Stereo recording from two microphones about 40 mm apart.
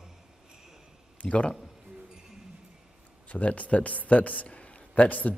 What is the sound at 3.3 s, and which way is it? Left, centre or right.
A man's voice, left.